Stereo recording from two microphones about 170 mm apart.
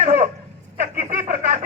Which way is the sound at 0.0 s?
45° right (ahead or behind).